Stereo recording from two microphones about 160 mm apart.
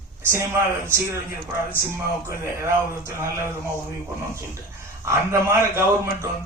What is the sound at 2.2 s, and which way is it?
A man's voice, 15° right (ahead or behind).